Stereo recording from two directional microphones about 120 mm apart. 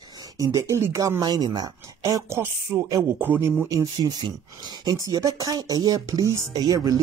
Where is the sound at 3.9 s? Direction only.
40° right (ahead or behind).